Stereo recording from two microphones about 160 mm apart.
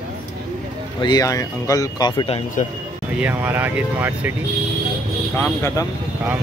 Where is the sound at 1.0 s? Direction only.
25° left (ahead or behind).